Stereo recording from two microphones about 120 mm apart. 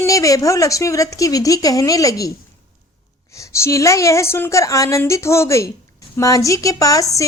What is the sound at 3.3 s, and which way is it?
A woman's voice, 25° left (ahead or behind).